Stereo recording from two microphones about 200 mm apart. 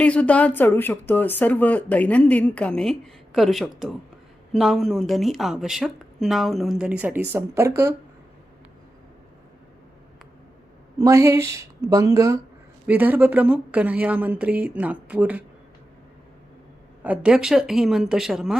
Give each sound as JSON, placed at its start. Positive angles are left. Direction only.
{"t": 0.0, "sound": "speech", "side_deg": 5}
{"t": 10.9, "sound": "speech", "side_deg": -15}
{"t": 17.0, "sound": "speech", "side_deg": -5}